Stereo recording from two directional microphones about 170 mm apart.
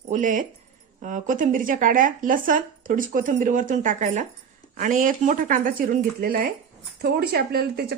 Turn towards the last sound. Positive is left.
turn(degrees=-70)  # may be behind; listen again after turning